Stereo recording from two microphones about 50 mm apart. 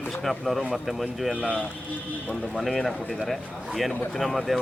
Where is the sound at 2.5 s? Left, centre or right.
Centre.